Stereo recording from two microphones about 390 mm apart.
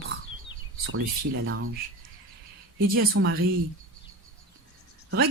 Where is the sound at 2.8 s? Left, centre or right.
Right.